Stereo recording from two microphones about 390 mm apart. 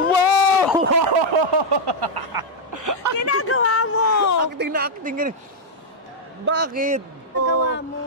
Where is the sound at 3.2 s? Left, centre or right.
Left.